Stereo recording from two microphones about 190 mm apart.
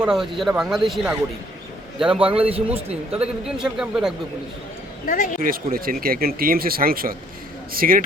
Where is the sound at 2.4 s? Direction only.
30° right (ahead or behind).